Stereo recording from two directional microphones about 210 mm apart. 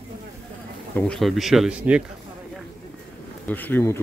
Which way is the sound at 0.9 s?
Centre (ahead or behind).